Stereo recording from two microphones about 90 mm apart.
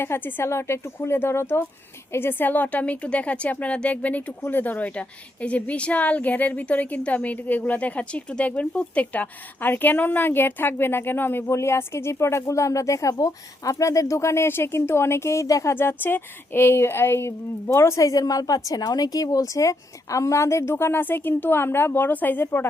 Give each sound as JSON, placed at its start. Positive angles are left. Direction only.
{"t": 0.0, "sound": "a woman's voice", "side_deg": 25}
{"t": 15.7, "sound": "a woman's voice", "side_deg": 25}